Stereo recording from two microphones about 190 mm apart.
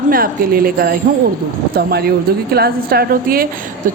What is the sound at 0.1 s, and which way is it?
Speech, 50° right (ahead or behind).